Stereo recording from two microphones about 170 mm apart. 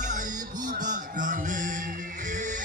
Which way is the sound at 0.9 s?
50° right (ahead or behind).